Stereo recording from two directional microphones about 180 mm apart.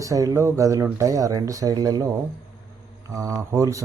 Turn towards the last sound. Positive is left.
turn(degrees=-20)  # may be behind; listen again after turning